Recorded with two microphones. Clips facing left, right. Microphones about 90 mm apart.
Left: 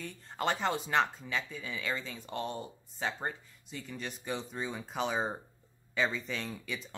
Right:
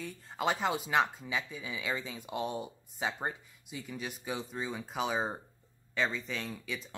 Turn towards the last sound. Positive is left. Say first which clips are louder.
# even
turn(degrees=0)  # may be behind; listen again after turning